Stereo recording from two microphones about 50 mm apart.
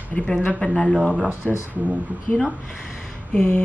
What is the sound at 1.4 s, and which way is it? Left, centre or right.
Speech, centre.